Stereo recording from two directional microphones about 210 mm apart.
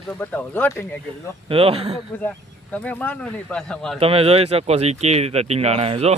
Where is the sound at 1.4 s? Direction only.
25° right (ahead or behind).